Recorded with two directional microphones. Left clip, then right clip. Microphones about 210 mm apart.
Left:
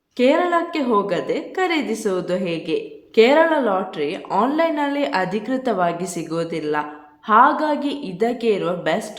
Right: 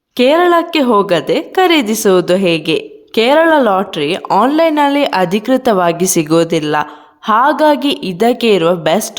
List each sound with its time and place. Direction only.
0.2 s a woman's voice: 45° right (ahead or behind)